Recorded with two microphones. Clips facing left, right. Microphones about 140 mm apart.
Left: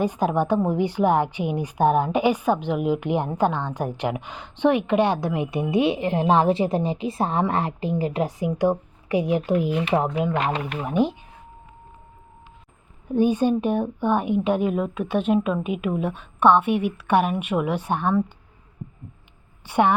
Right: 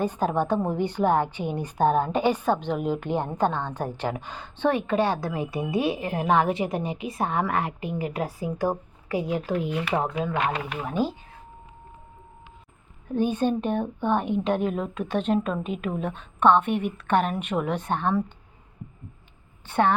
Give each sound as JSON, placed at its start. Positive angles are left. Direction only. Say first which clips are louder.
{"t": 0.0, "sound": "a woman's voice", "louder": "left 3 dB", "side_deg": 10}
{"t": 13.1, "sound": "a woman's voice", "louder": "left 4 dB", "side_deg": 10}
{"t": 19.6, "sound": "a woman's voice", "louder": "left 3 dB", "side_deg": 10}